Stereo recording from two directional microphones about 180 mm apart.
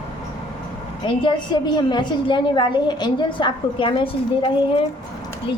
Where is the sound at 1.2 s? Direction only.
25° left (ahead or behind).